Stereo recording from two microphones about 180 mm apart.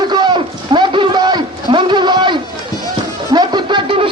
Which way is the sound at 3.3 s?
25° right (ahead or behind).